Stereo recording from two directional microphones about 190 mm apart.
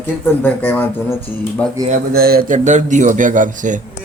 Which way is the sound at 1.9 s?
50° right (ahead or behind).